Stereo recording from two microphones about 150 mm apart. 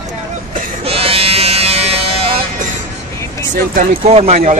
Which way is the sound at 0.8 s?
40° right (ahead or behind).